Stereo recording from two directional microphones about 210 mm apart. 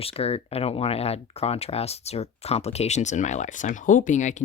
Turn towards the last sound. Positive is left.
turn(degrees=35)  # may be behind; listen again after turning